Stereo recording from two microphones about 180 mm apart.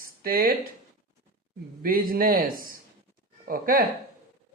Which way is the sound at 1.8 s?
55° right (ahead or behind).